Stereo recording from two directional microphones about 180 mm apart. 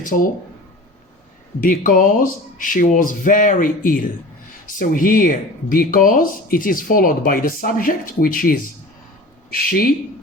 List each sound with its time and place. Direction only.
0.0 s speech: 50° left (ahead or behind)
1.6 s speech: 50° left (ahead or behind)